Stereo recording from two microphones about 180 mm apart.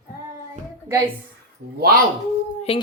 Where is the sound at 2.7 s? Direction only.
35° left (ahead or behind).